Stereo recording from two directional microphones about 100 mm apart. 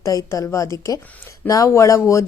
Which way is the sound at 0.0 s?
35° left (ahead or behind).